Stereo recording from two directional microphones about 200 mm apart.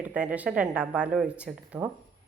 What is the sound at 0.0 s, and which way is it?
Speech, 5° right (ahead or behind).